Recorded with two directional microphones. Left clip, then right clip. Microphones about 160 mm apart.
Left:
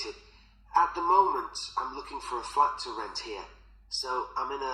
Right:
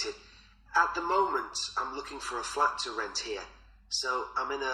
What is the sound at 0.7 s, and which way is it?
A man's voice, 40° right (ahead or behind).